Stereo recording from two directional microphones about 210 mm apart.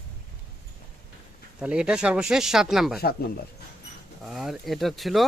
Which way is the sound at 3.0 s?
45° left (ahead or behind).